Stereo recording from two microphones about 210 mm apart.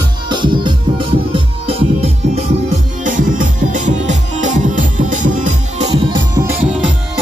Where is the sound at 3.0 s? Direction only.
40° right (ahead or behind).